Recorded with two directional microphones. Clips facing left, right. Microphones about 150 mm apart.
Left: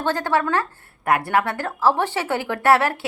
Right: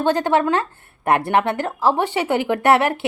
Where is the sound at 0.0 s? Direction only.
20° right (ahead or behind).